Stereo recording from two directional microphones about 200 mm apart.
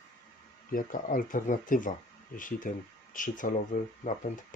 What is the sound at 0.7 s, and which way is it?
Speech, 40° left (ahead or behind).